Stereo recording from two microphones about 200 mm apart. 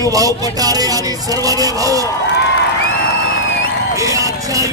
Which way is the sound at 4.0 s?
15° right (ahead or behind).